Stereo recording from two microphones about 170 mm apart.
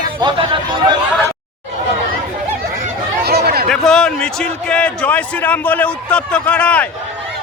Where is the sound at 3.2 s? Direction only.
70° right (ahead or behind).